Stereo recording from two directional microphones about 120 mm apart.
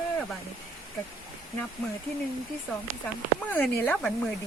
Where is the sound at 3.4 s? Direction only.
15° left (ahead or behind).